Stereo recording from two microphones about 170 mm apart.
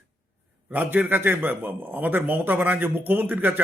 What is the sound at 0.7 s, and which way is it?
Speech, 10° right (ahead or behind).